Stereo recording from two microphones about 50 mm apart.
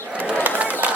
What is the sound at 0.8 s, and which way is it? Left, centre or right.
Run, right.